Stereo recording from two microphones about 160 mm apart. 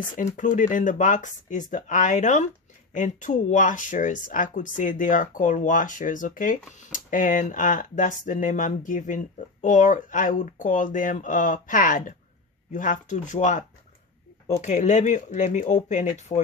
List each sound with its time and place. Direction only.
0.1 s speech: 55° left (ahead or behind)
16.3 s speech: 35° left (ahead or behind)